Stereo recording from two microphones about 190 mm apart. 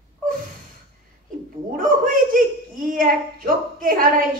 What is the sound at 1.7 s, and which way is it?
A woman's voice, 45° right (ahead or behind).